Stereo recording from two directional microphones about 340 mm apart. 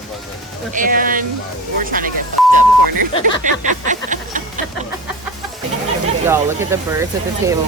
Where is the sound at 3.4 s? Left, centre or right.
Right.